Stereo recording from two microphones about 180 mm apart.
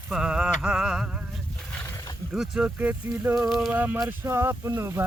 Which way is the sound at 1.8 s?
15° left (ahead or behind).